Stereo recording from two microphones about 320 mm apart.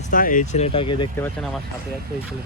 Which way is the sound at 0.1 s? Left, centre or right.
Left.